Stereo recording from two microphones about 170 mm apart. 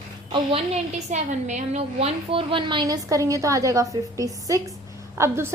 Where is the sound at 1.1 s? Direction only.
45° right (ahead or behind).